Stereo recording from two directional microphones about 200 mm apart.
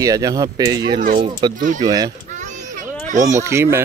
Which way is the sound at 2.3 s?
35° right (ahead or behind).